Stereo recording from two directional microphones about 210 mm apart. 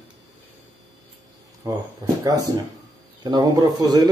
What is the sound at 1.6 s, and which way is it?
Speech, 15° right (ahead or behind).